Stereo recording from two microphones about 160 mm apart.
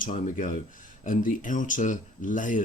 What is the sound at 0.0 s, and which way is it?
Speech, 55° left (ahead or behind).